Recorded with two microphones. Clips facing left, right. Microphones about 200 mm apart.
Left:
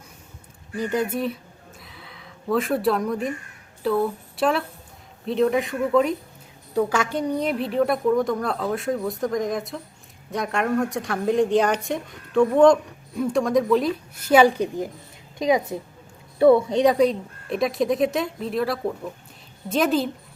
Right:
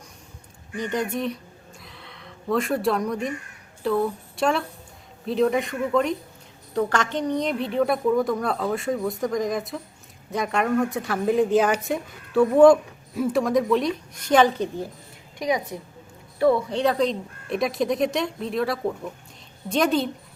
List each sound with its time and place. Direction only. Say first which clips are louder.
0.8 s speech: left 2 dB; 5° left (ahead or behind)
1.8 s a sound: right 1 dB; centre (ahead or behind)
3.8 s speech: left 1 dB; centre (ahead or behind)
15.4 s a woman's voice: left 4 dB; 25° left (ahead or behind); by 20.1 s centre (ahead or behind)